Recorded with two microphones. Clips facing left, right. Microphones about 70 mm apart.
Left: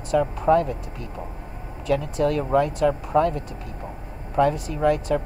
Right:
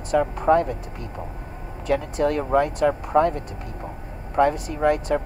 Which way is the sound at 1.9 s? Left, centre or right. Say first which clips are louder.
Even; centre.